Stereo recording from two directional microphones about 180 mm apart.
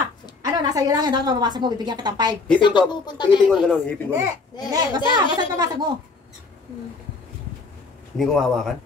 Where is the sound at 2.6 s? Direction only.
25° left (ahead or behind).